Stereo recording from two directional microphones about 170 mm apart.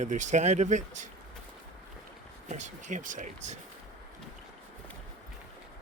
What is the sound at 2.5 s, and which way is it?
Speech, 45° right (ahead or behind).